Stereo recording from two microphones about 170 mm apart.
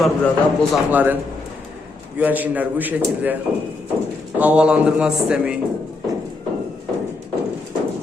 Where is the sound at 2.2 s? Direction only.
10° right (ahead or behind).